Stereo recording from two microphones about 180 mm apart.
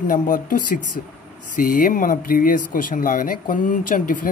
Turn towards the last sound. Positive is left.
turn(degrees=50)  # may be behind; listen again after turning